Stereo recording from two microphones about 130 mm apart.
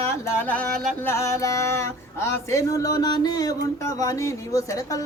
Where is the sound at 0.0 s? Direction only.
20° left (ahead or behind).